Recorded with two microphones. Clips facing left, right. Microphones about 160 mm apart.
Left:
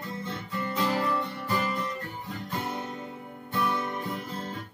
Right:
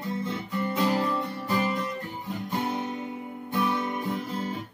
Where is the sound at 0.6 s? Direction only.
20° right (ahead or behind).